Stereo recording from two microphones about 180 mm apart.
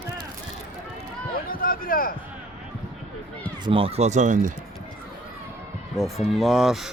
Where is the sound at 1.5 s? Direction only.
55° left (ahead or behind).